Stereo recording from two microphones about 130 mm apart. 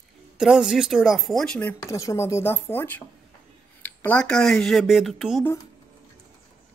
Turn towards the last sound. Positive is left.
turn(degrees=0)  # may be behind; listen again after turning